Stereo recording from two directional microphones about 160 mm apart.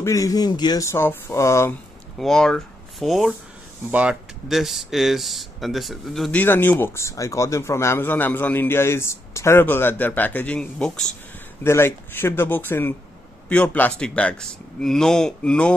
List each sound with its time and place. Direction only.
0.0 s speech: 20° left (ahead or behind)
2.1 s speech: 5° left (ahead or behind)
6.4 s a man's voice: 10° left (ahead or behind)